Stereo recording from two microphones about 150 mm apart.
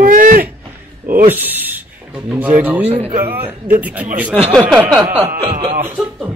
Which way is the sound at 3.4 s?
10° right (ahead or behind).